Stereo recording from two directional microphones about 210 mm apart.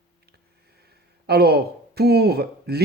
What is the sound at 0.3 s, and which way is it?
Speech, 50° right (ahead or behind).